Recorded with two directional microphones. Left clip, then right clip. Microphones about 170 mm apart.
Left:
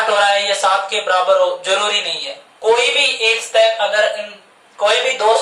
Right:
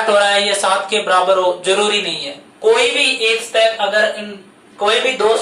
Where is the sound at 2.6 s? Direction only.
10° left (ahead or behind).